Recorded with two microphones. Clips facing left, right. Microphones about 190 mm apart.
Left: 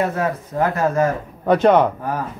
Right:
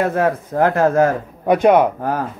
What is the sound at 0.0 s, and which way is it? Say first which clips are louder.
Speech: right 3 dB; 60° right (ahead or behind).